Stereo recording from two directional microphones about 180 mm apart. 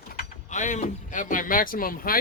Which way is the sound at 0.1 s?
50° left (ahead or behind).